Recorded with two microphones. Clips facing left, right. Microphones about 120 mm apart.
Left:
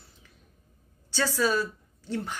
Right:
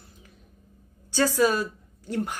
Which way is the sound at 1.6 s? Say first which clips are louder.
Even; 15° right (ahead or behind).